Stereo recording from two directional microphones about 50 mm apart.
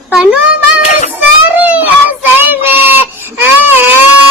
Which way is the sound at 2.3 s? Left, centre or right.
Right.